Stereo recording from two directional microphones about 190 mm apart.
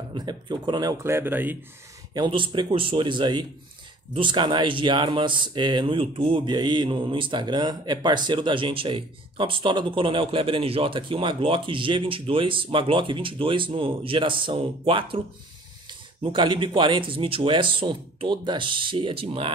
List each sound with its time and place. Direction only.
0.1 s speech: 20° right (ahead or behind)
2.1 s speech: 25° right (ahead or behind)